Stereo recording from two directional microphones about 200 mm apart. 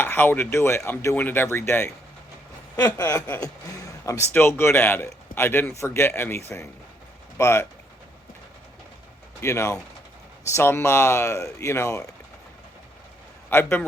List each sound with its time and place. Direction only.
0.0 s speech: 10° left (ahead or behind)
9.4 s speech: 15° left (ahead or behind)
13.5 s speech: 10° left (ahead or behind)